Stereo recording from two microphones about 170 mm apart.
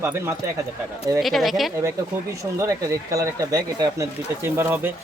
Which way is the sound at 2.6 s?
20° right (ahead or behind).